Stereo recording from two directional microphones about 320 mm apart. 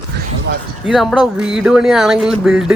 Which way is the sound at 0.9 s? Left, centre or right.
Centre.